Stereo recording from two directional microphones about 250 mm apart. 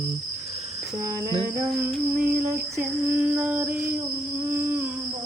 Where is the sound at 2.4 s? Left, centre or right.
Centre.